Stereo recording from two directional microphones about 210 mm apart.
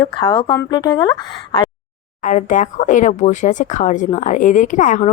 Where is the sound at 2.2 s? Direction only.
35° left (ahead or behind).